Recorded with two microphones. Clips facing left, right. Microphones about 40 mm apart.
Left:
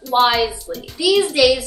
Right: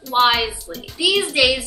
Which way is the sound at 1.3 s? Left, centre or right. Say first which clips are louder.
Left 3 dB; centre.